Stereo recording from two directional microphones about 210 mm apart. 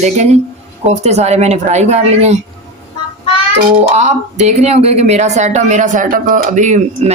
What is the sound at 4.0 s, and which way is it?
Speech, 35° right (ahead or behind).